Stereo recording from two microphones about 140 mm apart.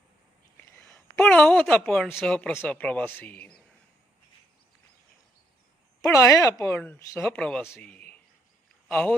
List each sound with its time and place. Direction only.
0.5 s whispering: 15° left (ahead or behind)
1.2 s speech: 5° left (ahead or behind)
6.0 s speech: 25° left (ahead or behind)
7.3 s speech: 5° left (ahead or behind)
7.8 s a sound: 10° left (ahead or behind)
8.9 s speech: 5° left (ahead or behind)